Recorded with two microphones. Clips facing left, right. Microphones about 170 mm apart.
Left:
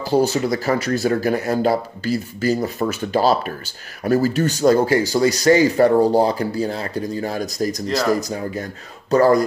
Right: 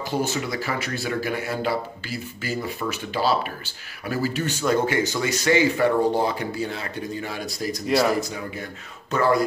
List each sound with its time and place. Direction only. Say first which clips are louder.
0.0 s speech: left 8 dB; 35° left (ahead or behind)